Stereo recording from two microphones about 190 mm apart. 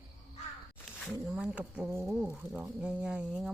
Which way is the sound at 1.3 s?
5° right (ahead or behind).